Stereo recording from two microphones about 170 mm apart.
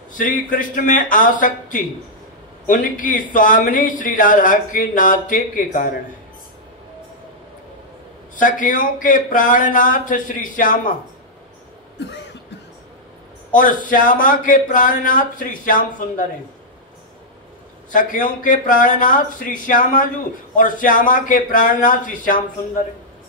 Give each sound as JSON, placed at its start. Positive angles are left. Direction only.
{"t": 0.2, "sound": "a man's voice", "side_deg": 50}
{"t": 8.4, "sound": "a man's voice", "side_deg": 50}
{"t": 12.0, "sound": "cough", "side_deg": 90}
{"t": 13.6, "sound": "a man's voice", "side_deg": 50}
{"t": 17.9, "sound": "a man's voice", "side_deg": 50}